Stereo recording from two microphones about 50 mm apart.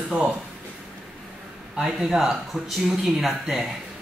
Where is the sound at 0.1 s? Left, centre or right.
Right.